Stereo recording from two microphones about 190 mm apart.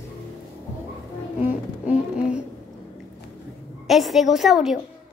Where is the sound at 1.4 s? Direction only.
5° right (ahead or behind).